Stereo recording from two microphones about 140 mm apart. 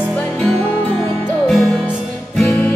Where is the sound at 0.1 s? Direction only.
10° left (ahead or behind).